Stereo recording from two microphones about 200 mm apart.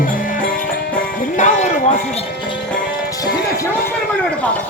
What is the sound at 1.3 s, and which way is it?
Music, 35° left (ahead or behind).